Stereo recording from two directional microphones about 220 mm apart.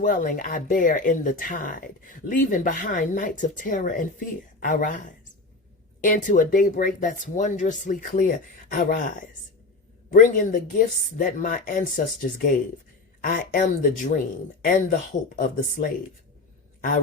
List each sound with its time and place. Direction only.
0.0 s speech: 35° left (ahead or behind)